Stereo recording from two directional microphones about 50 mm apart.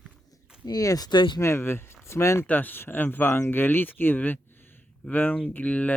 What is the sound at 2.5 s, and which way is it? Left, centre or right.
Speech, left.